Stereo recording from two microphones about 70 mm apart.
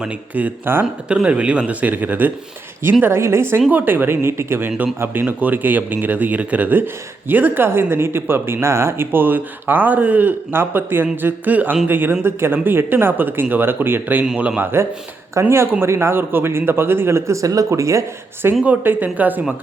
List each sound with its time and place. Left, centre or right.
0.0 s speech: centre
1.0 s speech: centre
3.0 s a man's voice: right
5.2 s a man's voice: right
14.3 s speech: centre
14.6 s a man's voice: right
18.6 s speech: right